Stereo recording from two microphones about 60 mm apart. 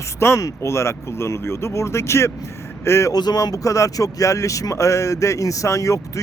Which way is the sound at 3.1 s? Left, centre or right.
Left.